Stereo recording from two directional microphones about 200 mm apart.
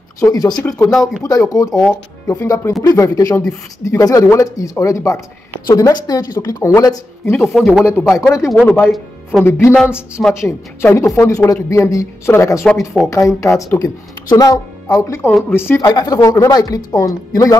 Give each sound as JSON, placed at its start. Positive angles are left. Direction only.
{"t": 0.2, "sound": "a woman's voice", "side_deg": 20}
{"t": 7.3, "sound": "speech", "side_deg": 0}
{"t": 9.4, "sound": "a woman's voice", "side_deg": 10}